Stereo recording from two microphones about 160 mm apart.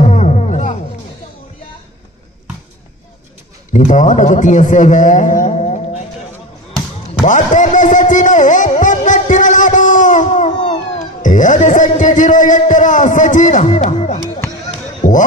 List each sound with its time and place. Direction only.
0.0 s music: 45° left (ahead or behind)
3.7 s a man's voice: 50° left (ahead or behind)
7.2 s music: 50° left (ahead or behind)
11.2 s a man's voice: 50° left (ahead or behind)